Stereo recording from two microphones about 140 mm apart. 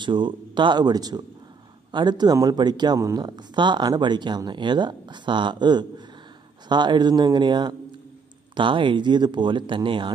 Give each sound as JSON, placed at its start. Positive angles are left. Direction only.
{"t": 0.0, "sound": "speech", "side_deg": -35}